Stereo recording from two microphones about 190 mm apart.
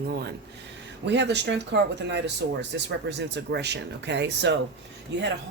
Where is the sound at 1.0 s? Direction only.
65° right (ahead or behind).